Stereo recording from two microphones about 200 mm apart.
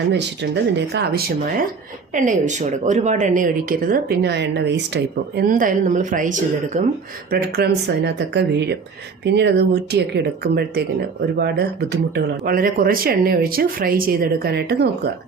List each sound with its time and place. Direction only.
0.1 s speech: 55° right (ahead or behind)
2.1 s speech: 40° right (ahead or behind)
7.3 s speech: 50° right (ahead or behind)